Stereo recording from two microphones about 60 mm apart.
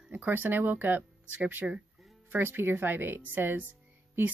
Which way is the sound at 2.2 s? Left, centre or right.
Right.